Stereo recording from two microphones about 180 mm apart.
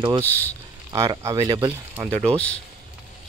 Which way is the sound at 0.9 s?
20° right (ahead or behind).